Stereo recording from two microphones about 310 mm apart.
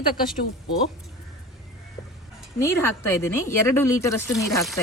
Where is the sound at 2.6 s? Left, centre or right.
Centre.